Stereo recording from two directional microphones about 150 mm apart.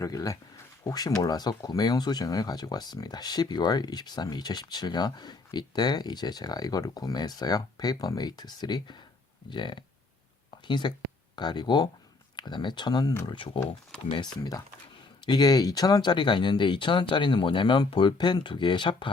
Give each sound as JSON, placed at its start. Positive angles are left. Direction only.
{"t": 0.0, "sound": "speech", "side_deg": 25}